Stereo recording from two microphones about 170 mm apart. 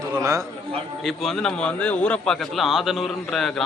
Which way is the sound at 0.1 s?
20° right (ahead or behind).